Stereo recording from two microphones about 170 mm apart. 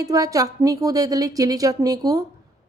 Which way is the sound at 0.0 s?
20° right (ahead or behind).